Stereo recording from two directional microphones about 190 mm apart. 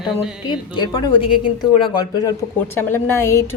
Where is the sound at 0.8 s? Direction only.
20° left (ahead or behind).